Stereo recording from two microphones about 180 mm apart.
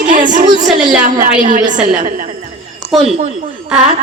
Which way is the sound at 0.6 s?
5° right (ahead or behind).